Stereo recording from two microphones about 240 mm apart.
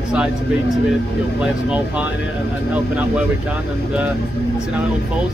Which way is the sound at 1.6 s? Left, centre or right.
Centre.